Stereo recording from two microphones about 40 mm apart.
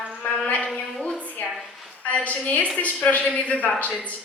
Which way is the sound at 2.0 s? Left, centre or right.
Left.